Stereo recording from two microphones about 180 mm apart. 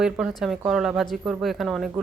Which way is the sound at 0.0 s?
Centre (ahead or behind).